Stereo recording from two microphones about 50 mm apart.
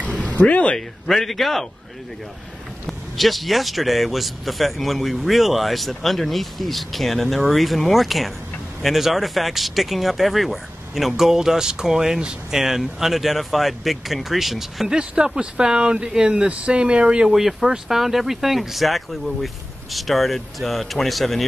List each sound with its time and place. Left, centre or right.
0.1 s a sound: left
0.7 s speech: centre
2.9 s speech: centre
15.0 s speech: centre
17.3 s speech: centre